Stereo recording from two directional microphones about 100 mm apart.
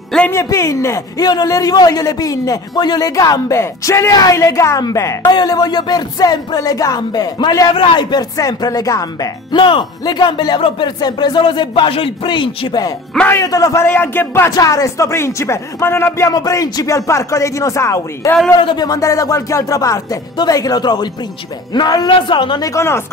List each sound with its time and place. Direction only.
0.3 s a man's voice: 30° left (ahead or behind)
5.2 s a man's voice: 45° left (ahead or behind)
7.7 s a man's voice: 60° left (ahead or behind); by 9.3 s 35° left (ahead or behind)
9.5 s speech: 55° left (ahead or behind)
13.3 s a man's voice: 35° left (ahead or behind)
13.8 s speech: 20° left (ahead or behind)
14.5 s speech: 35° left (ahead or behind)
16.3 s a man's voice: 35° left (ahead or behind)
18.6 s speech: 55° left (ahead or behind)
18.9 s a man's voice: 35° left (ahead or behind); by 22.6 s 55° left (ahead or behind)
22.6 s speech: 30° left (ahead or behind)